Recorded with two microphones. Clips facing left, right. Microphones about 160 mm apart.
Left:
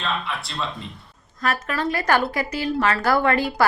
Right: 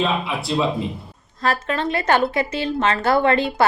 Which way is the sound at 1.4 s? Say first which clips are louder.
Right 3 dB; 30° right (ahead or behind).